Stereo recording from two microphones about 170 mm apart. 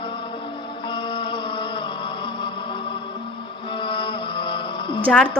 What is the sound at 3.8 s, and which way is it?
Mantra, 30° left (ahead or behind).